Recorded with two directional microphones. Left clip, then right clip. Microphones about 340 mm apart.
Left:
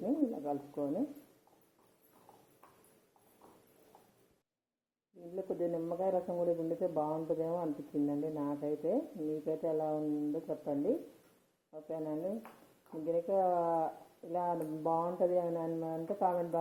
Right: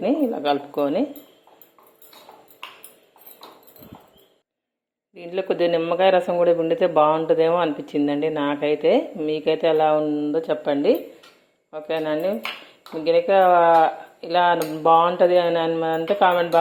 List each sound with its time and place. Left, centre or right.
0.0 s speech: right
5.3 s speech: right